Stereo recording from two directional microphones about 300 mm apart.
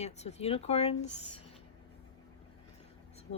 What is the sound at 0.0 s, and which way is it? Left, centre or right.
Speech, left.